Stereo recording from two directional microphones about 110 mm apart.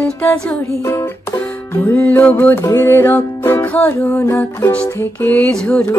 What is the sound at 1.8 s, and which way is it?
Music, 15° left (ahead or behind).